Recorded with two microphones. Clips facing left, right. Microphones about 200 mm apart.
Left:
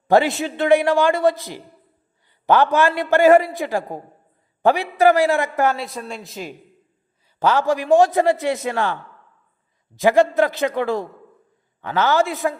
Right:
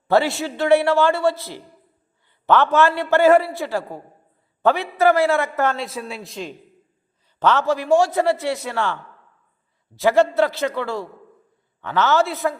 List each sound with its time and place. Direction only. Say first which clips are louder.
0.1 s a man's voice: left 2 dB; 15° left (ahead or behind)
5.7 s a man's voice: right 1 dB; centre (ahead or behind); by 12.5 s 15° left (ahead or behind)